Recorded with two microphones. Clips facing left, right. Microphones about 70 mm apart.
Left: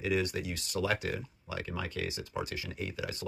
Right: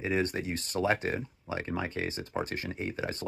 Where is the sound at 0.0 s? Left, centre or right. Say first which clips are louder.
Right 2 dB; right.